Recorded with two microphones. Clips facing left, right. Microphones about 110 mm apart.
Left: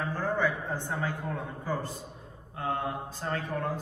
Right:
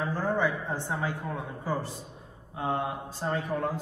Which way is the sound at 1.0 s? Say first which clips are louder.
Right 1 dB; 15° right (ahead or behind).